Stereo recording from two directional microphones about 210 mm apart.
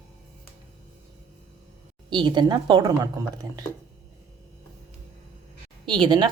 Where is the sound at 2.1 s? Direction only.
20° right (ahead or behind).